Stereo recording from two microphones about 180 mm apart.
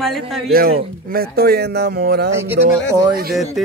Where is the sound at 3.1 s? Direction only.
55° right (ahead or behind).